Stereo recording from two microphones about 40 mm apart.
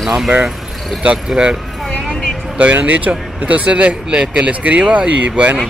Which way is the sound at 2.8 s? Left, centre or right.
Right.